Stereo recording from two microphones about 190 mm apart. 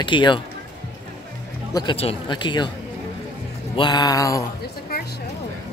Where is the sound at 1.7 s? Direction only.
20° left (ahead or behind).